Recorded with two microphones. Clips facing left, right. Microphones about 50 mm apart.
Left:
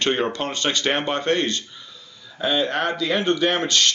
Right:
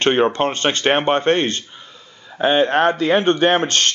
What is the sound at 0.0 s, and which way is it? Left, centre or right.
Speech, right.